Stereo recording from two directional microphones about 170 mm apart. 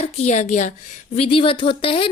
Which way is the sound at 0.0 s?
40° left (ahead or behind).